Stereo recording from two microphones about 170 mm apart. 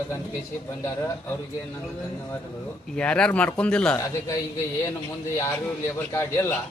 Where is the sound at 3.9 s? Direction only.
20° left (ahead or behind).